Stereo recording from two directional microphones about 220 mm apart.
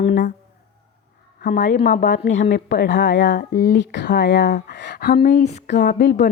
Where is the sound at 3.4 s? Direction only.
40° left (ahead or behind).